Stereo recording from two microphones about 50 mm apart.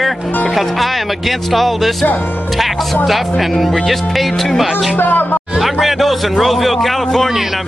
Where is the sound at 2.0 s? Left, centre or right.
Left.